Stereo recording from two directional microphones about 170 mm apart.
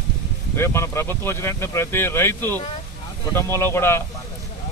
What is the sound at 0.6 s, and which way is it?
Speech, 15° left (ahead or behind).